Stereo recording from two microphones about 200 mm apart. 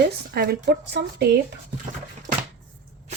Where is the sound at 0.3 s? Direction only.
50° right (ahead or behind).